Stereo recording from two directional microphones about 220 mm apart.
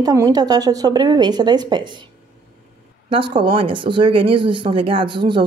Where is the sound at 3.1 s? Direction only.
20° right (ahead or behind).